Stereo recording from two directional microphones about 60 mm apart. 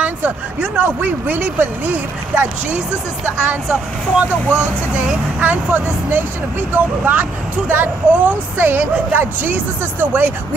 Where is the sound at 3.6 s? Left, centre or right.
Centre.